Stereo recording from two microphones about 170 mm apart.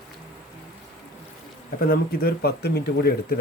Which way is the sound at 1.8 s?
60° left (ahead or behind).